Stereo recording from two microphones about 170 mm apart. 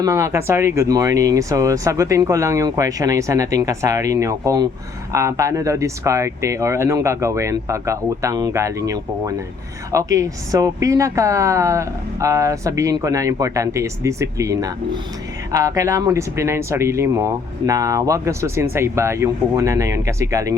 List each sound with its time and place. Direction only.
0.0 s speech: 20° right (ahead or behind)